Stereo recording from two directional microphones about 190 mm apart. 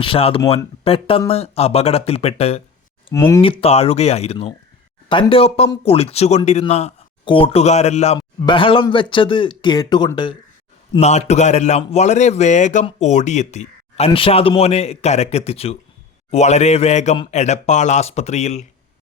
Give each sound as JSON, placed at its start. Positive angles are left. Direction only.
{"t": 0.0, "sound": "speech", "side_deg": 30}
{"t": 3.1, "sound": "speech", "side_deg": 15}
{"t": 3.4, "sound": "speech", "side_deg": 30}
{"t": 10.9, "sound": "speech", "side_deg": 35}